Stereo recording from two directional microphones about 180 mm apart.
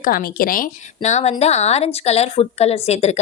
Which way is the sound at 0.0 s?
55° left (ahead or behind).